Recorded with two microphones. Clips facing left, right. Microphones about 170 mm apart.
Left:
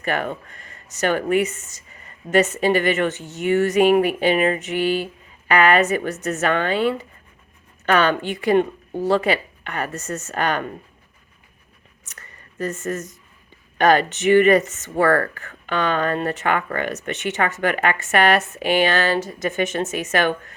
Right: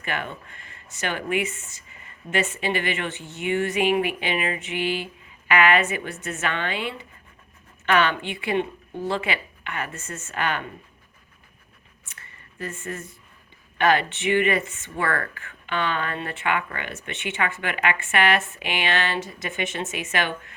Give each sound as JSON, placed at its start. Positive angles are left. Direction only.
{"t": 0.0, "sound": "speech", "side_deg": 40}
{"t": 12.0, "sound": "a sound", "side_deg": 40}
{"t": 13.7, "sound": "speech", "side_deg": 40}